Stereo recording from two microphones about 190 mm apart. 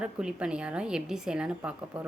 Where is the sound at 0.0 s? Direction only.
5° right (ahead or behind).